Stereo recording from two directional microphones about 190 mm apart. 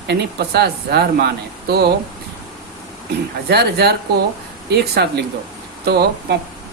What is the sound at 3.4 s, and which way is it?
Speech, 60° right (ahead or behind).